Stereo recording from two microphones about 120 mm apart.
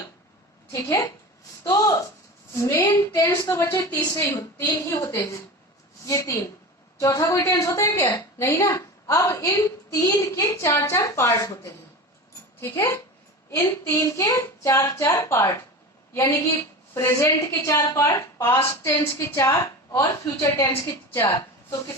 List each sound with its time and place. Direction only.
0.7 s a woman's voice: 25° left (ahead or behind)
1.6 s a sound: 25° left (ahead or behind)
2.5 s a woman's voice: 25° left (ahead or behind)